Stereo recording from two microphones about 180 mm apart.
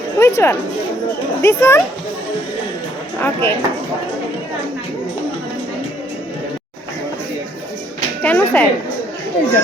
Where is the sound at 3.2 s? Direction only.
10° left (ahead or behind).